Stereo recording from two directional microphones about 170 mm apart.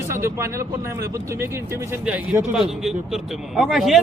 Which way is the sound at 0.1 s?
15° right (ahead or behind).